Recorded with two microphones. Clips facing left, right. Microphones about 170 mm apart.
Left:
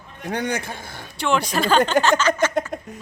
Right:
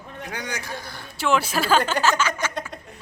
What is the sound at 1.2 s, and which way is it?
A woman's voice, 5° right (ahead or behind).